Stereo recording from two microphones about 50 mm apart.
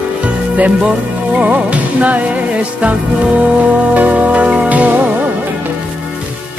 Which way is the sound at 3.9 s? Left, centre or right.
Right.